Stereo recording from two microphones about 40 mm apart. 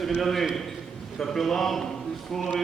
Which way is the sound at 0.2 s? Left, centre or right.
Centre.